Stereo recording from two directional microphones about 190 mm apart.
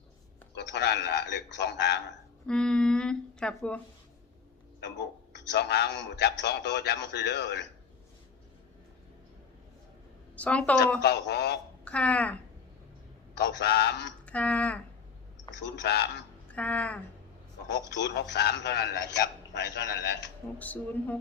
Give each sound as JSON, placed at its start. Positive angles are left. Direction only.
{"t": 0.5, "sound": "a man's voice", "side_deg": 60}
{"t": 2.5, "sound": "speech", "side_deg": 5}
{"t": 4.8, "sound": "a man's voice", "side_deg": 70}
{"t": 10.3, "sound": "a woman's voice", "side_deg": 5}
{"t": 11.0, "sound": "a man's voice", "side_deg": 60}
{"t": 11.9, "sound": "speech", "side_deg": 5}
{"t": 13.4, "sound": "a man's voice", "side_deg": 60}
{"t": 14.3, "sound": "speech", "side_deg": 5}
{"t": 15.6, "sound": "a man's voice", "side_deg": 65}
{"t": 16.5, "sound": "speech", "side_deg": 5}
{"t": 17.9, "sound": "a man's voice", "side_deg": 65}
{"t": 20.6, "sound": "speech", "side_deg": 10}